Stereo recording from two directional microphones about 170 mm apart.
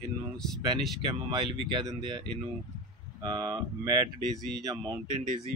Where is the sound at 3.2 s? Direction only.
25° right (ahead or behind).